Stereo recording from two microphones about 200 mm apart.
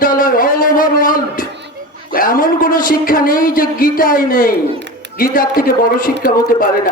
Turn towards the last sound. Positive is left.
turn(degrees=45)  # may be behind; listen again after turning